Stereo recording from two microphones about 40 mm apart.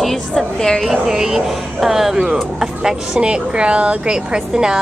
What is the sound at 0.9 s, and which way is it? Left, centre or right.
A woman's voice, centre.